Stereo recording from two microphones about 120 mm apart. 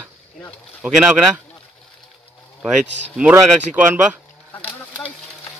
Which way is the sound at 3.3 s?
15° right (ahead or behind).